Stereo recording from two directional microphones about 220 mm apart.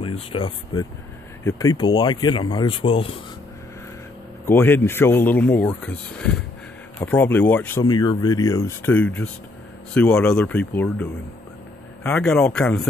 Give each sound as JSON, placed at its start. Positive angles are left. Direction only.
{"t": 0.0, "sound": "speech", "side_deg": 25}
{"t": 4.5, "sound": "speech", "side_deg": 10}
{"t": 7.8, "sound": "speech", "side_deg": 20}